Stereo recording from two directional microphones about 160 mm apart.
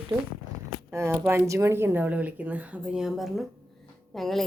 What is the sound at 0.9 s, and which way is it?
A woman's voice, 15° right (ahead or behind).